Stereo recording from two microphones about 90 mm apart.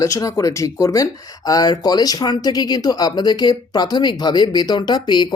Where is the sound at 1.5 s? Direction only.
45° left (ahead or behind).